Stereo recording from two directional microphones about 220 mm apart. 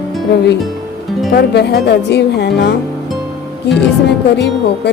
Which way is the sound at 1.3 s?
50° left (ahead or behind).